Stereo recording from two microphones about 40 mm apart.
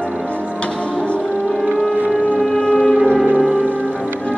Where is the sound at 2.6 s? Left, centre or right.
Left.